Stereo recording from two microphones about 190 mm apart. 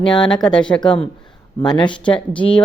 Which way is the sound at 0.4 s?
5° left (ahead or behind).